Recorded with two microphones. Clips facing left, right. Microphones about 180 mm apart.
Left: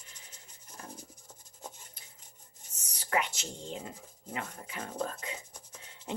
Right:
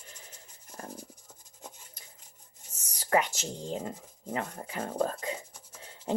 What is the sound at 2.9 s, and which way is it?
Speech, 40° right (ahead or behind).